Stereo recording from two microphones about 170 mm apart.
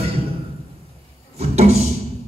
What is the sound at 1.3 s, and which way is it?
Speech, 40° right (ahead or behind).